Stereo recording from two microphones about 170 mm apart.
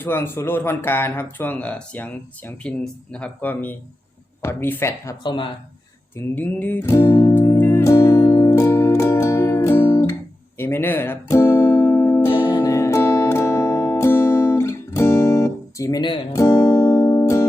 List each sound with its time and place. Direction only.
0.0 s speech: 15° left (ahead or behind)
5.2 s speech: 30° left (ahead or behind)
6.1 s music: 10° left (ahead or behind); by 16.4 s 30° left (ahead or behind)
16.4 s music: 15° left (ahead or behind)